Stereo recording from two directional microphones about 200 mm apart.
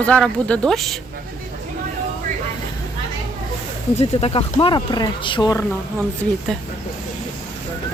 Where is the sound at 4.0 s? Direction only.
30° left (ahead or behind).